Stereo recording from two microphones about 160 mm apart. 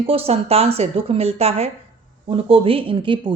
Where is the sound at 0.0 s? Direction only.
35° right (ahead or behind).